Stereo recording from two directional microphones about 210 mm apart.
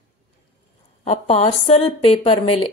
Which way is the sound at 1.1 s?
30° left (ahead or behind).